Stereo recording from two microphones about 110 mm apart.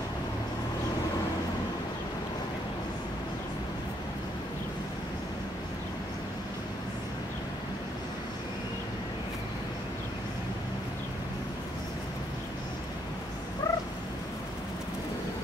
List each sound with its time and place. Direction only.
13.6 s cat: 30° left (ahead or behind)